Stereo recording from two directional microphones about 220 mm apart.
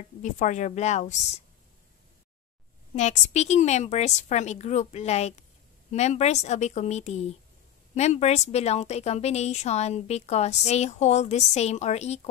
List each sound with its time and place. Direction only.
0.2 s a woman's voice: 35° left (ahead or behind)
3.0 s a woman's voice: 30° left (ahead or behind)